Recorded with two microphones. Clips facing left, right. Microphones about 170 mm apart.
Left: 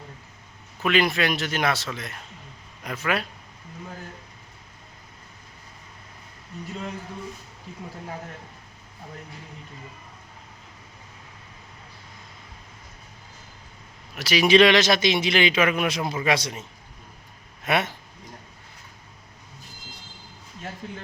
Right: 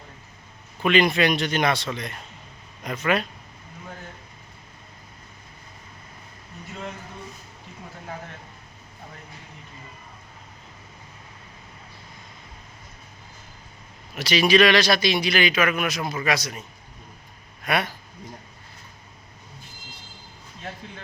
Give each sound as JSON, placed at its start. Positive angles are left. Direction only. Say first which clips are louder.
{"t": 0.8, "sound": "speech", "louder": "right 3 dB", "side_deg": 5}
{"t": 14.2, "sound": "speech", "louder": "right 1 dB", "side_deg": 5}
{"t": 14.4, "sound": "a man's voice", "louder": "left 1 dB", "side_deg": 25}